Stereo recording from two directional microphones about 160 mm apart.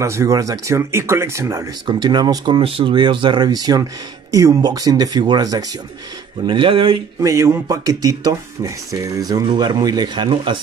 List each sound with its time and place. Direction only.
0.0 s speech: 20° right (ahead or behind); by 7.0 s 35° right (ahead or behind)
7.2 s speech: 20° right (ahead or behind)